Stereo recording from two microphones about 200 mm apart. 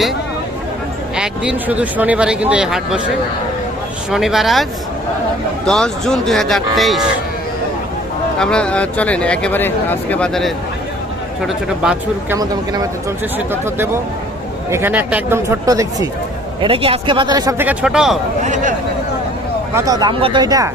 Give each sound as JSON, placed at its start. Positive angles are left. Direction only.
{"t": 1.1, "sound": "speech", "side_deg": -5}
{"t": 4.1, "sound": "speech", "side_deg": 0}
{"t": 5.6, "sound": "speech", "side_deg": 5}
{"t": 8.4, "sound": "speech", "side_deg": 5}
{"t": 12.4, "sound": "speech", "side_deg": -20}
{"t": 16.6, "sound": "speech", "side_deg": -25}
{"t": 17.7, "sound": "speech", "side_deg": -5}
{"t": 18.4, "sound": "speech", "side_deg": -40}
{"t": 19.7, "sound": "speech", "side_deg": -15}